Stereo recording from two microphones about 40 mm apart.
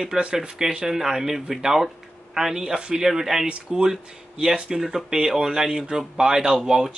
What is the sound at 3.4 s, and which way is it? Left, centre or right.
Speech, right.